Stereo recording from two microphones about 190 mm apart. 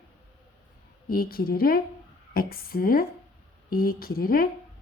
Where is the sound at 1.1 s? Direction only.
50° left (ahead or behind).